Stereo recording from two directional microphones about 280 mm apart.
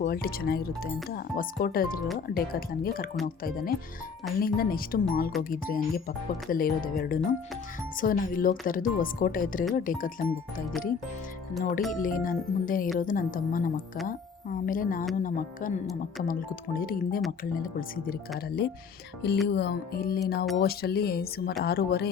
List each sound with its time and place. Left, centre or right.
0.0 s speech: left
11.9 s speech: left